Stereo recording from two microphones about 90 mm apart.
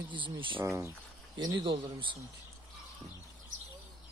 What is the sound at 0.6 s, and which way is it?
Speech, 30° right (ahead or behind).